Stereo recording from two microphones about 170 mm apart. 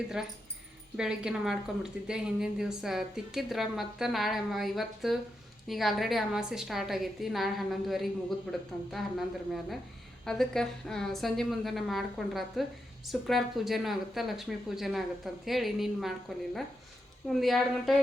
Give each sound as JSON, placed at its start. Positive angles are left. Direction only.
{"t": 0.2, "sound": "a woman's voice", "side_deg": -5}
{"t": 17.2, "sound": "a woman's voice", "side_deg": 0}